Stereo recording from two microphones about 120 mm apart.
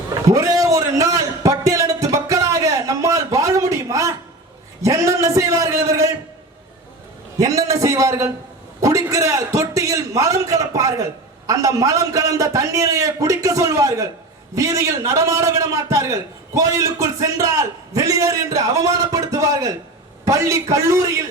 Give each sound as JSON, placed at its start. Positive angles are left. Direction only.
{"t": 0.1, "sound": "a sound", "side_deg": -30}
{"t": 4.8, "sound": "a man's voice", "side_deg": -25}
{"t": 7.3, "sound": "a man's voice", "side_deg": -30}